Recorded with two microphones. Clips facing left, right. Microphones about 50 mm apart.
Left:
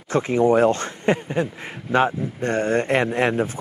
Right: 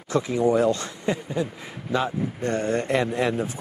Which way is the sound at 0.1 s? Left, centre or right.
Left.